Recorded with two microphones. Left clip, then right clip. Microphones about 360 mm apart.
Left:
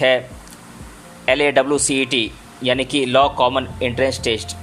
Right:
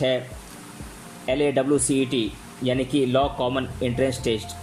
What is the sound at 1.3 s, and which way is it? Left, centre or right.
Speech, centre.